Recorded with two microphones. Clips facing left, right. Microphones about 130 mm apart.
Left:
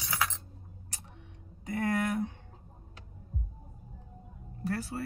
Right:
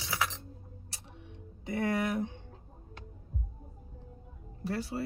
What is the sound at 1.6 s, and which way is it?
Speech, 25° right (ahead or behind).